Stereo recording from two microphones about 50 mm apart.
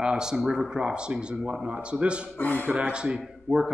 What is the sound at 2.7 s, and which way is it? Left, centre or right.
A man's voice, right.